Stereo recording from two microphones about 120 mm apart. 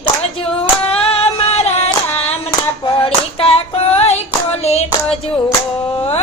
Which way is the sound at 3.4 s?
55° left (ahead or behind).